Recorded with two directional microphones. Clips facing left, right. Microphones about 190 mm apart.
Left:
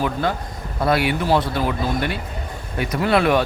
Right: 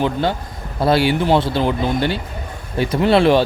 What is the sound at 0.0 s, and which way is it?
Speech, 30° right (ahead or behind).